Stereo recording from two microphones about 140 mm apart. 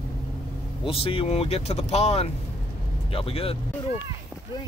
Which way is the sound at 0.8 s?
40° left (ahead or behind).